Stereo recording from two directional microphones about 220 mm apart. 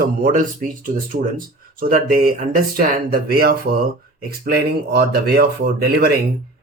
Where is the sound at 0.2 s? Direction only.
35° right (ahead or behind).